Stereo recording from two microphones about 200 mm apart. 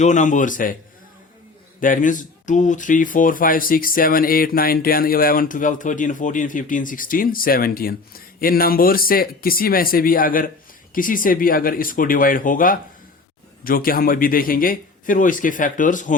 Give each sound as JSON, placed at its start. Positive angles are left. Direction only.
{"t": 0.0, "sound": "a man's voice", "side_deg": 40}
{"t": 1.8, "sound": "speech", "side_deg": 40}